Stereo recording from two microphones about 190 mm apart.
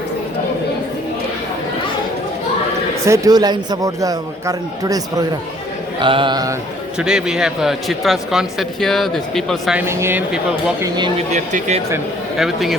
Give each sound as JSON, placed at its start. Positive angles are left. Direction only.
{"t": 3.1, "sound": "a man's voice", "side_deg": -20}
{"t": 7.0, "sound": "speech", "side_deg": -5}
{"t": 9.8, "sound": "speech", "side_deg": -15}
{"t": 11.3, "sound": "speech", "side_deg": -40}
{"t": 12.4, "sound": "speech", "side_deg": 0}